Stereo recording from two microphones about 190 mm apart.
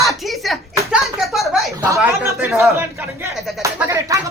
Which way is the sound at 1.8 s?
15° right (ahead or behind).